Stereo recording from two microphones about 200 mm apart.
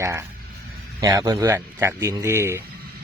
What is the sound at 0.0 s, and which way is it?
Speech, 15° right (ahead or behind).